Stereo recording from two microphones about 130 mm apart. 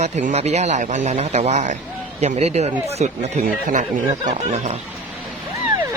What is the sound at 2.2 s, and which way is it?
Speech, 60° right (ahead or behind).